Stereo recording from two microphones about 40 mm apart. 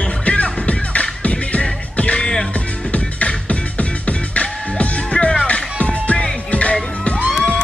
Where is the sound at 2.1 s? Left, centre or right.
Centre.